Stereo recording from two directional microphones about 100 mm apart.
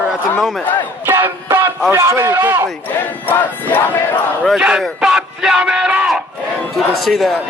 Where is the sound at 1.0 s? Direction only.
25° right (ahead or behind).